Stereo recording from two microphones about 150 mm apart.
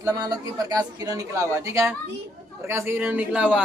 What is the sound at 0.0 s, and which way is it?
A woman's voice, 25° right (ahead or behind).